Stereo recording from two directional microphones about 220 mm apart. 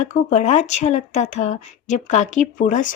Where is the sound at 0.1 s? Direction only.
30° left (ahead or behind).